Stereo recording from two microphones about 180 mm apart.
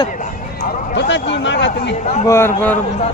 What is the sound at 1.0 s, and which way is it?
Speech, 85° left.